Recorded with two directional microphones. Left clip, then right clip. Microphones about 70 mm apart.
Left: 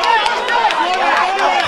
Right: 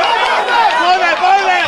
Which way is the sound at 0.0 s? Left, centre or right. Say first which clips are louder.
Right 2 dB; right.